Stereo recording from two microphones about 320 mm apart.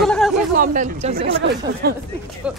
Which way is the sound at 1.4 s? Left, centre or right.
Right.